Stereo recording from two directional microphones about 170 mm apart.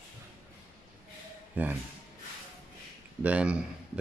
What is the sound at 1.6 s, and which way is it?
Speech, 10° right (ahead or behind).